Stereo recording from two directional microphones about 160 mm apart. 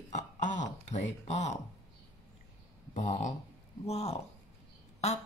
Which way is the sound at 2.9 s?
45° left (ahead or behind).